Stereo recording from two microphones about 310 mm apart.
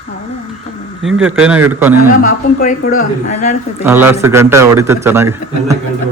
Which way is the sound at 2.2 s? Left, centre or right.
Left.